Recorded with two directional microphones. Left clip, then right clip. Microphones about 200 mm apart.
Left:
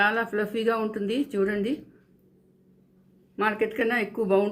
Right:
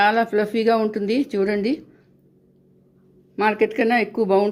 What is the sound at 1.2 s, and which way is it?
Speech, 45° right (ahead or behind).